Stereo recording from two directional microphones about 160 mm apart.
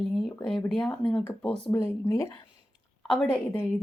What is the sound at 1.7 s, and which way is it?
Speech, 20° left (ahead or behind).